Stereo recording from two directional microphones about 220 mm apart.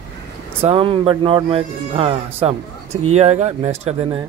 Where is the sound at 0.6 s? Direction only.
25° right (ahead or behind).